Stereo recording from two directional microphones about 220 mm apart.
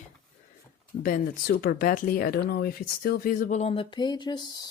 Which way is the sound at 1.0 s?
40° left (ahead or behind).